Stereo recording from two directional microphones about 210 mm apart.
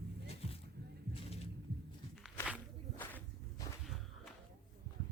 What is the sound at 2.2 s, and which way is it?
Walk, 5° right (ahead or behind).